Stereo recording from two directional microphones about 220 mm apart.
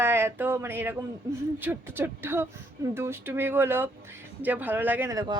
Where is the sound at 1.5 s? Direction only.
10° right (ahead or behind).